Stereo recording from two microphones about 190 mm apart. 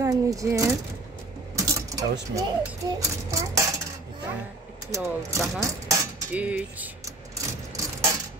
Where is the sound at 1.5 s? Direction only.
15° right (ahead or behind).